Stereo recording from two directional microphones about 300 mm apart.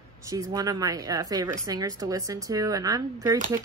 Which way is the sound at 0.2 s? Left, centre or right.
Centre.